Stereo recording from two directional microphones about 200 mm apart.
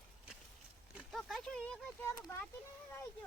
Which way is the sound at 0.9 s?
Centre (ahead or behind).